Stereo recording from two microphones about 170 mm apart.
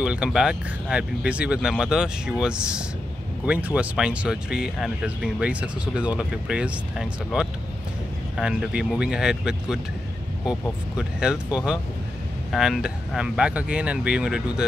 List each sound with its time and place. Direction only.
0.0 s speech: 5° right (ahead or behind)
10.4 s speech: 20° left (ahead or behind)
11.0 s speech: 5° right (ahead or behind)